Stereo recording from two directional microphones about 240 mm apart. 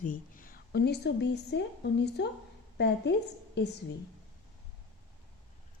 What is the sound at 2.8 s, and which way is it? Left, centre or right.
Speech, left.